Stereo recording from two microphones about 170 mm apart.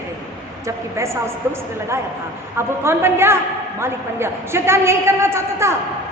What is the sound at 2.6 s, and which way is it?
A woman's voice, 15° right (ahead or behind).